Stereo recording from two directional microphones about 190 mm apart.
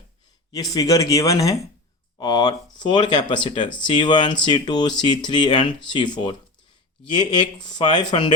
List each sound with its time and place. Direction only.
0.5 s speech: 20° left (ahead or behind)